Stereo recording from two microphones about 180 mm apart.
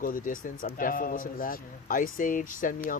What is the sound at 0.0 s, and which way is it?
A man's voice, 50° left (ahead or behind).